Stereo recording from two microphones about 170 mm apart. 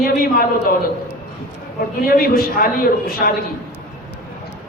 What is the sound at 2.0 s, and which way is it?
A man's voice, 60° left (ahead or behind).